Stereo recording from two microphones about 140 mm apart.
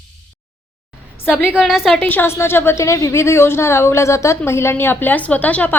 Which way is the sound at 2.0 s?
15° left (ahead or behind).